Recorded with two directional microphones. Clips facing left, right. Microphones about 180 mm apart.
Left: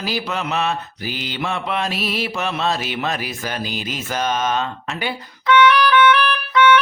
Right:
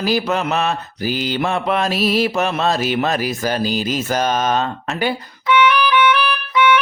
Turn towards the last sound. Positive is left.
turn(degrees=-10)  # may be behind; listen again after turning